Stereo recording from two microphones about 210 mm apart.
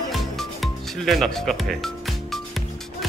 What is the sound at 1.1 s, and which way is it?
Speech, centre (ahead or behind).